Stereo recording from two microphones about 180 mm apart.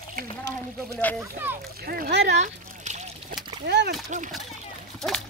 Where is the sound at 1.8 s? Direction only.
55° right (ahead or behind).